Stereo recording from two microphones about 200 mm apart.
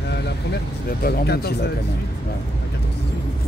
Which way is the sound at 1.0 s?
50° left (ahead or behind).